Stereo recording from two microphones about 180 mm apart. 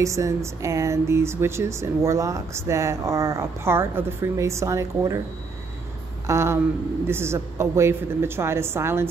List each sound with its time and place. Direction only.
0.0 s speech: 15° right (ahead or behind)
6.2 s speech: 15° right (ahead or behind)